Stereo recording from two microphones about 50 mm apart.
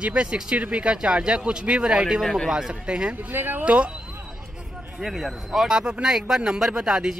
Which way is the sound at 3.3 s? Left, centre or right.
Right.